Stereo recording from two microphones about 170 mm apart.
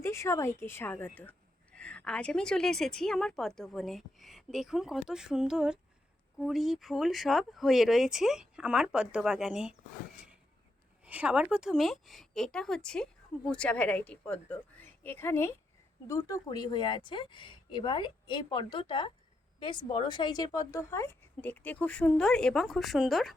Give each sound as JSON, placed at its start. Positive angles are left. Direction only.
{"t": 0.0, "sound": "a woman's voice", "side_deg": 15}
{"t": 11.0, "sound": "a woman's voice", "side_deg": -10}